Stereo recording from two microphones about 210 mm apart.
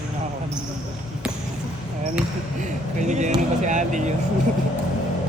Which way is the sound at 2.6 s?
35° right (ahead or behind).